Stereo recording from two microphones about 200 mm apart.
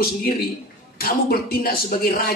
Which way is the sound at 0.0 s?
45° left (ahead or behind).